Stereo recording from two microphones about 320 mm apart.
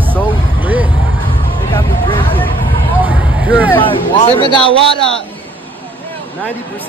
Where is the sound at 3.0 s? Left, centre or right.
Centre.